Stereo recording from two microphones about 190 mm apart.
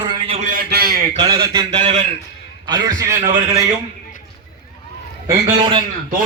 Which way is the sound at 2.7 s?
20° right (ahead or behind).